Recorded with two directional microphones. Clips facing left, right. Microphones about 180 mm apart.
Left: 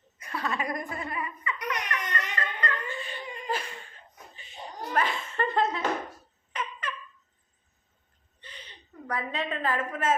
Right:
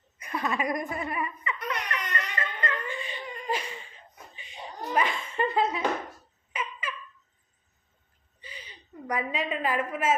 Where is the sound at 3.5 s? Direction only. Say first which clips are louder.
Right 1 dB; 10° right (ahead or behind).